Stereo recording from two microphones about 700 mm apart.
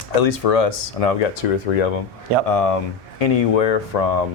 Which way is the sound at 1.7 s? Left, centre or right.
Left.